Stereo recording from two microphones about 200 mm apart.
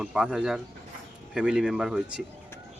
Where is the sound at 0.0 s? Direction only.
5° right (ahead or behind).